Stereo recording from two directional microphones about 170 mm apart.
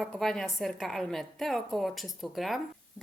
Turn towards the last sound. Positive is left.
turn(degrees=0)  # may be behind; listen again after turning